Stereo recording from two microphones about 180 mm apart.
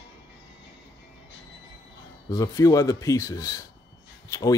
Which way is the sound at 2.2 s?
20° left (ahead or behind).